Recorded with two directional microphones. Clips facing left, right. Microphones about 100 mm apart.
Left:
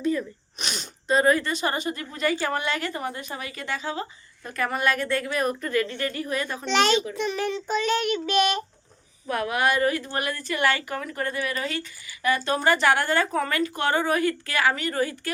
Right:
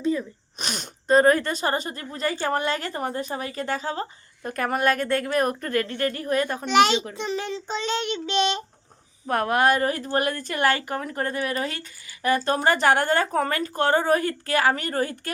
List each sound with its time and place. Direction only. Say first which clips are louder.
0.0 s sneeze: right 1 dB; 25° right (ahead or behind)
0.6 s a woman's voice: right 2 dB; 45° right (ahead or behind)
6.7 s a child's voice: right 2 dB; 15° right (ahead or behind)
7.1 s a child's voice: left 2 dB; 25° right (ahead or behind)
9.2 s a woman's voice: right 3 dB; 45° right (ahead or behind)